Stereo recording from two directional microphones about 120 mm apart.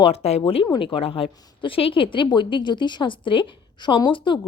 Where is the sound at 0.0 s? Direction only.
60° left (ahead or behind).